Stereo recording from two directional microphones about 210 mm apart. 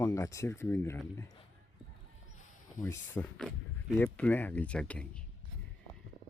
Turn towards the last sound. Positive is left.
turn(degrees=5)  # may be behind; listen again after turning